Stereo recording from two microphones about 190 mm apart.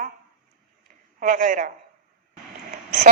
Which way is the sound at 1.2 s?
45° right (ahead or behind).